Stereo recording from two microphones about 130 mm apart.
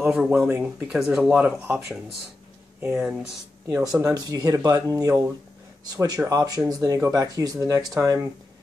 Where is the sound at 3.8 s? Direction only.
25° right (ahead or behind).